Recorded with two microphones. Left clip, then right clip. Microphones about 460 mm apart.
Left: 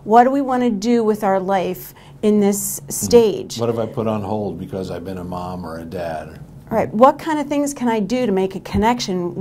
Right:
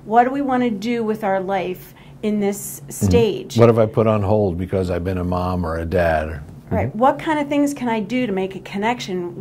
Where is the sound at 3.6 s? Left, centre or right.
Right.